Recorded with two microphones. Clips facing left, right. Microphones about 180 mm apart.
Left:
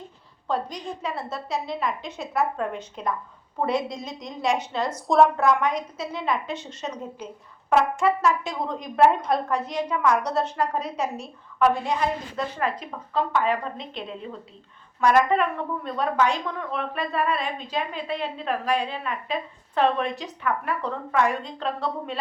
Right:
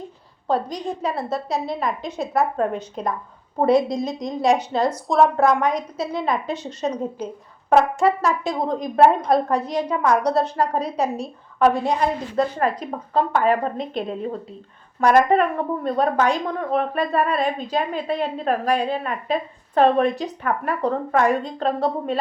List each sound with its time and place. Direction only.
0.4 s a woman's voice: 35° right (ahead or behind)
5.0 s a woman's voice: centre (ahead or behind)
5.4 s a woman's voice: 35° right (ahead or behind)